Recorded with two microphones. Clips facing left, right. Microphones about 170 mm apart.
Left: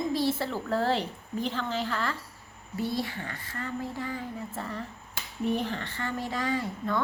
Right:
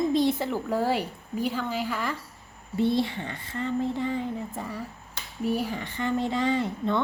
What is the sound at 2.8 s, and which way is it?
A woman's voice, 25° right (ahead or behind).